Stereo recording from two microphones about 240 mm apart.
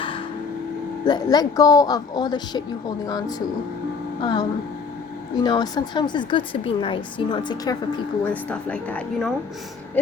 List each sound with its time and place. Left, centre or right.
1.0 s speech: centre